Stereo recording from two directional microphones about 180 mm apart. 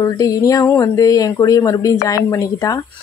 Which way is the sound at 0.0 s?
20° left (ahead or behind).